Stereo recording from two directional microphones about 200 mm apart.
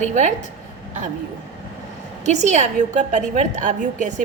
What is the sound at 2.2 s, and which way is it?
A woman's voice, 35° right (ahead or behind).